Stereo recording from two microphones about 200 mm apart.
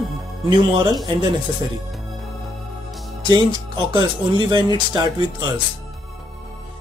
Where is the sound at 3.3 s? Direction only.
25° right (ahead or behind).